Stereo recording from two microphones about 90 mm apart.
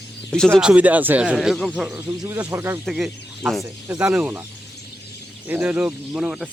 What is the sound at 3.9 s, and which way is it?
Speech, 15° right (ahead or behind).